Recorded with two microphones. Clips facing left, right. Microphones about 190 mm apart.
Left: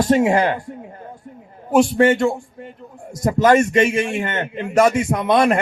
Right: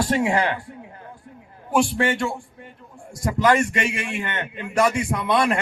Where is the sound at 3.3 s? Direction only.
45° left (ahead or behind).